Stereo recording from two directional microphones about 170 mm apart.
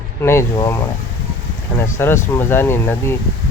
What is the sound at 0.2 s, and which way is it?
Speech, 15° left (ahead or behind).